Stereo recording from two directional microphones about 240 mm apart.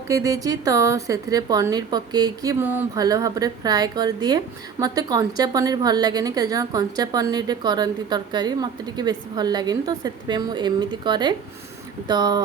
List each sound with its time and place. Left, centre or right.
0.1 s a woman's voice: centre